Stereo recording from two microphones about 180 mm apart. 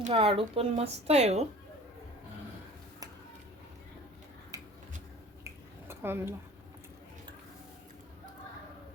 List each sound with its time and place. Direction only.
0.0 s speech: 30° right (ahead or behind)
5.9 s speech: 10° right (ahead or behind)